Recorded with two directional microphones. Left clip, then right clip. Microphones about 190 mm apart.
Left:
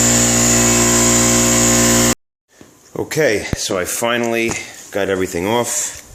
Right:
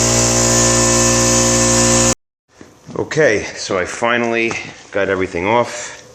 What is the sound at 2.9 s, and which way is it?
Speech, 15° left (ahead or behind).